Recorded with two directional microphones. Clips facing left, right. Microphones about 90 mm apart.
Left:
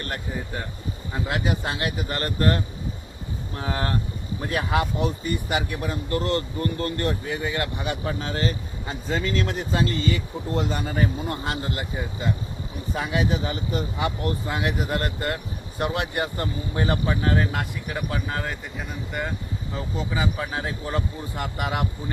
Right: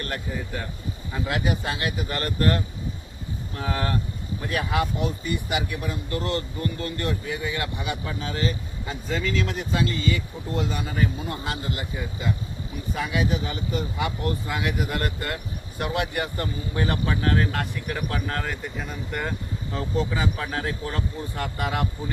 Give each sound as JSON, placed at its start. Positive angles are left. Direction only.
{"t": 1.3, "sound": "speech", "side_deg": 30}
{"t": 20.4, "sound": "speech", "side_deg": 15}